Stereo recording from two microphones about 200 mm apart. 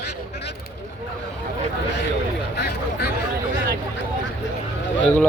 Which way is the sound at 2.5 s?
55° left (ahead or behind).